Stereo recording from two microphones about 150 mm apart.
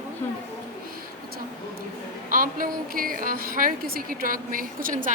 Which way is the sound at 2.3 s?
65° right (ahead or behind).